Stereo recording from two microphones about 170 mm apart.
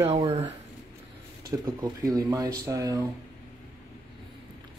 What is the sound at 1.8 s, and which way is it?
Speech, 20° right (ahead or behind).